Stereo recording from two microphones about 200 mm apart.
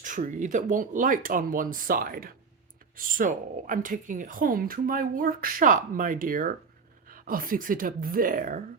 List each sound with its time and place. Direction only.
0.0 s speech: 40° right (ahead or behind)